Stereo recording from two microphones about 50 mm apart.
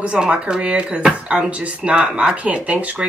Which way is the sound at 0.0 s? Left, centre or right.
Right.